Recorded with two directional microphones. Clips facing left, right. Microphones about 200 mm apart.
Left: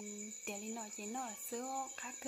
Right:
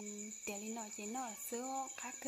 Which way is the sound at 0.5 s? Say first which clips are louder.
Even; centre (ahead or behind).